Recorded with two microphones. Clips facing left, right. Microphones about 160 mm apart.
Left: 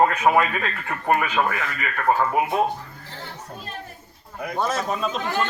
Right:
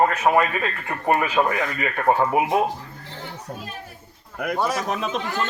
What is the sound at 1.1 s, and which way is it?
Speech, 25° right (ahead or behind).